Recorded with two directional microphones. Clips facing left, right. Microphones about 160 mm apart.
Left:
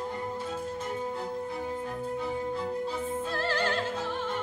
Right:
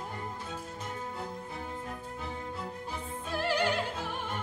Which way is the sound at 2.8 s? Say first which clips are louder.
Left 8 dB; 15° right (ahead or behind).